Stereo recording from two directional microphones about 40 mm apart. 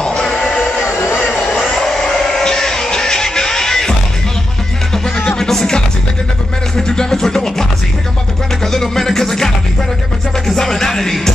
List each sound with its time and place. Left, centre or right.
0.0 s music: centre
0.8 s vehicle: right
1.8 s a sound: centre
2.1 s music: centre
5.4 s music: centre
8.7 s a sound: centre
10.4 s music: centre